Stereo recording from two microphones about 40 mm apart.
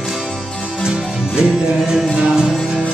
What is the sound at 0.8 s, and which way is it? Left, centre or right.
Music, centre.